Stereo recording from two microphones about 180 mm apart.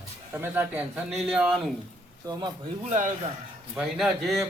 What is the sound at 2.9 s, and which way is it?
Speech, 45° right (ahead or behind).